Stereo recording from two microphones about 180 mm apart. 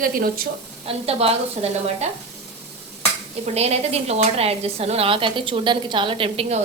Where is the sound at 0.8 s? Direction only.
35° right (ahead or behind).